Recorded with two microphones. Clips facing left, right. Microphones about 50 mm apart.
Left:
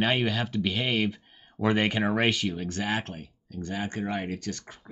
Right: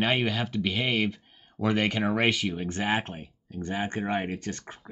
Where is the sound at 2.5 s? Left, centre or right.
Right.